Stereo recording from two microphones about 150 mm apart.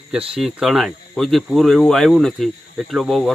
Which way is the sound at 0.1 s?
5° right (ahead or behind).